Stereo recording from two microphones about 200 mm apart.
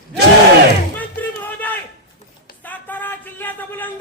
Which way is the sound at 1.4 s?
10° left (ahead or behind).